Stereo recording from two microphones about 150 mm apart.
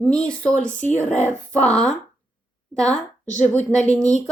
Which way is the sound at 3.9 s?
10° left (ahead or behind).